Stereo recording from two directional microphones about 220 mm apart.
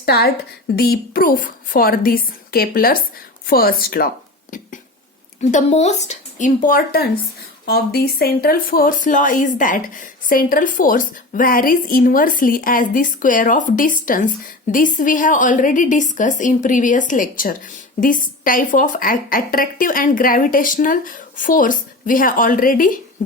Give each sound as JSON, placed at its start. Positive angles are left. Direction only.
{"t": 0.0, "sound": "a woman's voice", "side_deg": 45}
{"t": 5.4, "sound": "speech", "side_deg": 35}